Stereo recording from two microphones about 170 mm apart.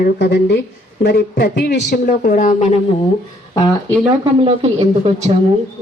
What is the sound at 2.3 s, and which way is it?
Speech, 55° left (ahead or behind).